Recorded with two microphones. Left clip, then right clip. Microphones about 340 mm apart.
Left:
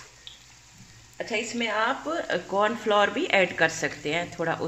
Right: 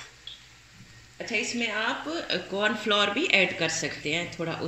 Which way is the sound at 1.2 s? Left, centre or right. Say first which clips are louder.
Even; left.